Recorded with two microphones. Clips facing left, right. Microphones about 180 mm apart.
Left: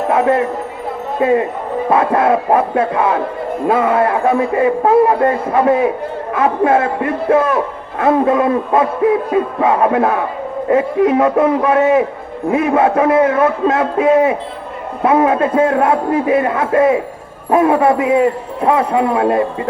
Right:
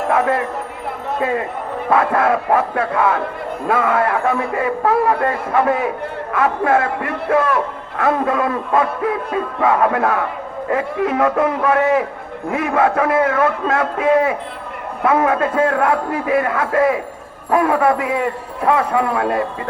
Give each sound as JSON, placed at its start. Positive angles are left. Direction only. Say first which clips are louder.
{"t": 0.1, "sound": "a man's voice", "louder": "left 4 dB", "side_deg": 20}